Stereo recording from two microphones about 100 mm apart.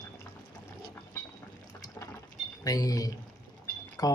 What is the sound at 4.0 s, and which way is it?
Speech, 40° left (ahead or behind).